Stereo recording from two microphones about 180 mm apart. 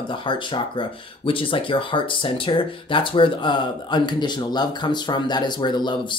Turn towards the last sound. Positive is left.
turn(degrees=25)  # may be behind; listen again after turning